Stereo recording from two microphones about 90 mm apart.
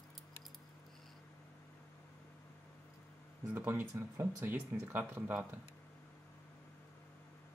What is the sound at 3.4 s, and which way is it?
Speech, 25° right (ahead or behind).